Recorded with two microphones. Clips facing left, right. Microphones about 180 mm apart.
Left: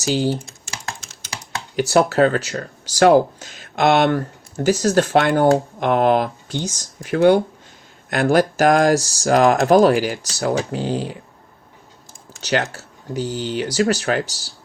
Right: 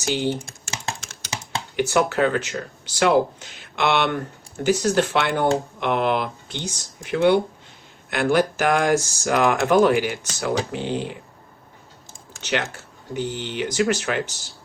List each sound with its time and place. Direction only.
0.1 s speech: 35° left (ahead or behind)
1.7 s speech: 40° left (ahead or behind)
12.4 s speech: 40° left (ahead or behind)